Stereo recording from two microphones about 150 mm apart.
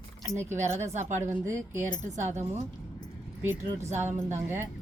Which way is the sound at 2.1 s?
50° right (ahead or behind).